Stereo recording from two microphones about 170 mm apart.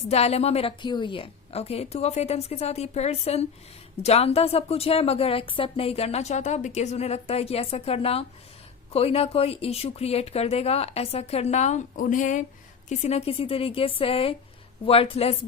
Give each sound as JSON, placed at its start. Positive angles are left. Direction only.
{"t": 0.1, "sound": "a woman's voice", "side_deg": 40}